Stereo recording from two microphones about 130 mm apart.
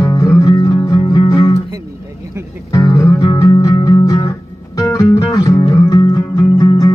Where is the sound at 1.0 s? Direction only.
40° left (ahead or behind).